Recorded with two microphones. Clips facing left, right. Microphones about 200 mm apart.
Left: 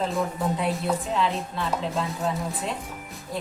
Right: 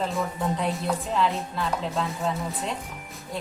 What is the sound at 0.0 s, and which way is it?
Music, centre (ahead or behind).